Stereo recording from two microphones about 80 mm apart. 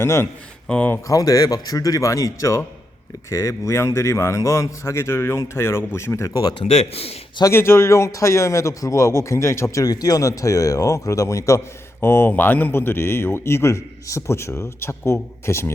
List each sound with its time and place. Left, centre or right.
0.0 s a man's voice: left
0.7 s speech: centre
1.0 s a man's voice: left
7.5 s a man's voice: left
9.8 s a man's voice: left
11.9 s a man's voice: left